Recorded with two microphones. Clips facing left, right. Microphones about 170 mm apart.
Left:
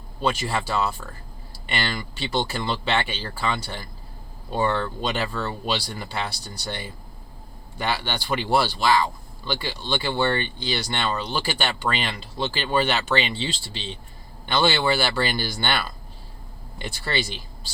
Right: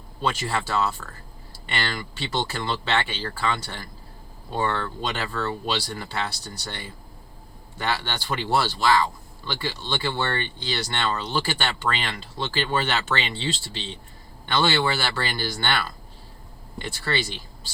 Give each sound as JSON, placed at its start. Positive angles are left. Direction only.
{"t": 0.2, "sound": "speech", "side_deg": 15}
{"t": 13.5, "sound": "speech", "side_deg": -25}
{"t": 14.4, "sound": "speech", "side_deg": 15}